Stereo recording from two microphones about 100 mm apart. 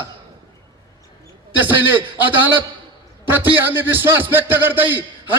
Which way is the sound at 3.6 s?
20° right (ahead or behind).